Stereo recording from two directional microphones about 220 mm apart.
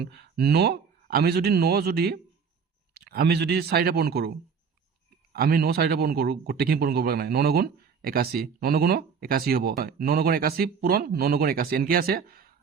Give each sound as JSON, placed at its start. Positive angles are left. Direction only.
{"t": 0.2, "sound": "a man's voice", "side_deg": -45}